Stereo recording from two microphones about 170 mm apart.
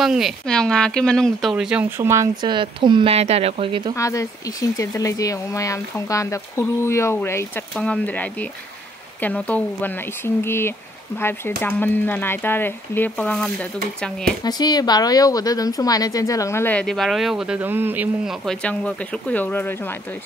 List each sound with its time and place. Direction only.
0.0 s speech: centre (ahead or behind); by 2.5 s 15° right (ahead or behind)
2.5 s speech: 30° right (ahead or behind)
3.9 s a woman's voice: 20° left (ahead or behind)
14.4 s a woman's voice: 25° left (ahead or behind)